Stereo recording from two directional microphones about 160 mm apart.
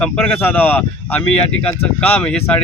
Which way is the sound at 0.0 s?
10° left (ahead or behind).